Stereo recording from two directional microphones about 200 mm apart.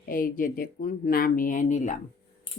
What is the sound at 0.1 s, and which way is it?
Speech, 45° left (ahead or behind).